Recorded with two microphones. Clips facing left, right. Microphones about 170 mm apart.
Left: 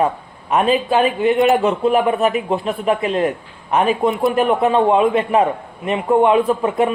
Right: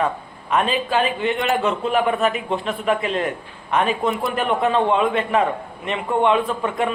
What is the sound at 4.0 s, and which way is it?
Speech, centre (ahead or behind).